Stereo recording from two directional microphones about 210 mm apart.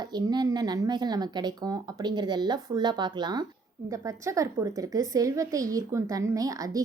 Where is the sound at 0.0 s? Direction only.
20° right (ahead or behind).